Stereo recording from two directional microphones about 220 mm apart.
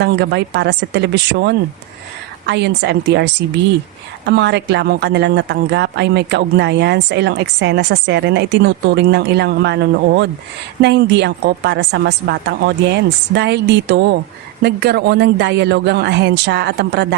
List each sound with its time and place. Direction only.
0.0 s speech: 50° right (ahead or behind)
4.3 s speech: 50° right (ahead or behind)